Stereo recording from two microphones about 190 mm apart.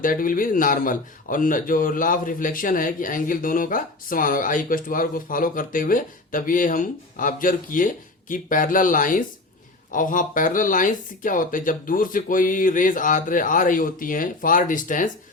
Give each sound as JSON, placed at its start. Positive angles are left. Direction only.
{"t": 0.0, "sound": "a man's voice", "side_deg": 45}